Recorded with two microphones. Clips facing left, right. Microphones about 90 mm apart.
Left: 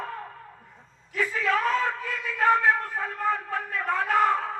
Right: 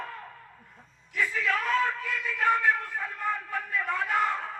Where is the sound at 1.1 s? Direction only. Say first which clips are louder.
Left 3 dB; 40° left (ahead or behind).